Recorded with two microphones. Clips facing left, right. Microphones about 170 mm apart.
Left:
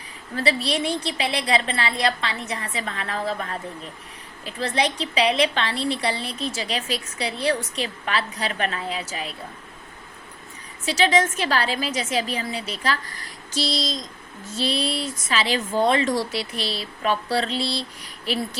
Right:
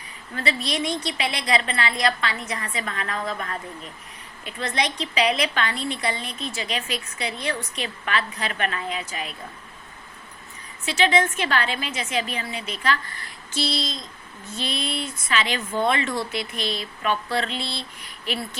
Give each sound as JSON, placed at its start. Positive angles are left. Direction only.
{"t": 0.3, "sound": "speech", "side_deg": 30}
{"t": 10.8, "sound": "speech", "side_deg": 35}